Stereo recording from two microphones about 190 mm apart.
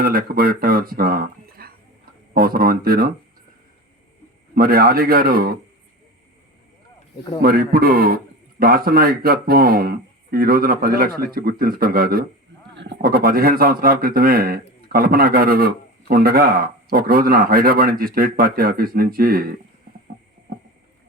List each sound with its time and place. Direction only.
0.0 s a man's voice: 50° right (ahead or behind)
4.5 s a man's voice: 50° right (ahead or behind)
7.4 s a man's voice: 50° right (ahead or behind)
12.7 s a man's voice: 65° right (ahead or behind); by 19.5 s 50° right (ahead or behind)